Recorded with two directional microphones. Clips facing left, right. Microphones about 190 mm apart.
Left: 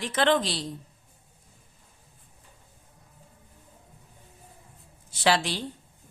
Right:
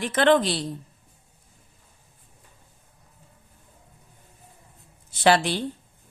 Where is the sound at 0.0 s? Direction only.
55° right (ahead or behind).